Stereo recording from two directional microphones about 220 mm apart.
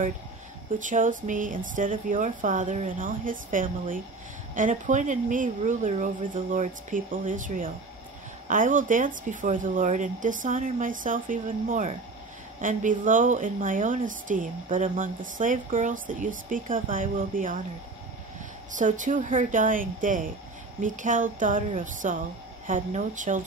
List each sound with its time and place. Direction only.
0.7 s a woman's voice: 35° right (ahead or behind)
18.7 s a woman's voice: 35° right (ahead or behind)